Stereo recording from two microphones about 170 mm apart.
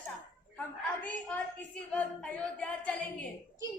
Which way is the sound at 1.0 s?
5° left (ahead or behind).